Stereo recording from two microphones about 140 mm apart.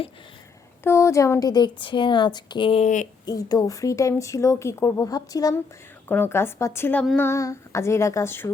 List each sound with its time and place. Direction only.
0.9 s speech: 20° left (ahead or behind); by 2.9 s 40° left (ahead or behind)
3.2 s speech: 25° left (ahead or behind)
6.1 s a woman's voice: 15° left (ahead or behind)